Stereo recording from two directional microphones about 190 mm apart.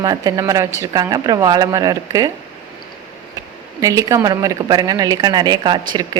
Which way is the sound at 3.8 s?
15° right (ahead or behind).